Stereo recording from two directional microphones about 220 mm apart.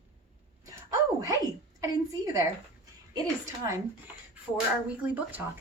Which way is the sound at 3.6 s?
15° right (ahead or behind).